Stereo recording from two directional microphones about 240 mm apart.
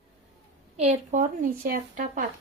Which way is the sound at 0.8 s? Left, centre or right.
Right.